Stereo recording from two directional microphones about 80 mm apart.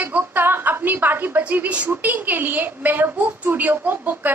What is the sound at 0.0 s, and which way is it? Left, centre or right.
A woman's voice, right.